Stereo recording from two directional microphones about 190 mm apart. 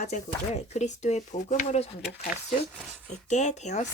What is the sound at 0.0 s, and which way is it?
Speech, 35° left (ahead or behind).